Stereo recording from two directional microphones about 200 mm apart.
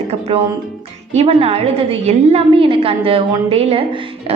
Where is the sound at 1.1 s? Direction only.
30° right (ahead or behind).